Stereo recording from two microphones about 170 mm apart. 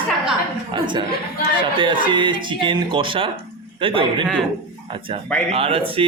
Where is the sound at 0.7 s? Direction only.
30° right (ahead or behind).